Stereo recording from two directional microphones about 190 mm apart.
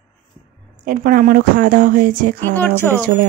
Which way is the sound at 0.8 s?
50° right (ahead or behind).